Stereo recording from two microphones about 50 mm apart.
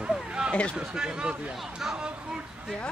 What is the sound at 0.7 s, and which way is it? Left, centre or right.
Speech, centre.